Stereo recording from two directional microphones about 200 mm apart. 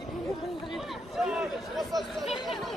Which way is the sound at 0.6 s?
Centre (ahead or behind).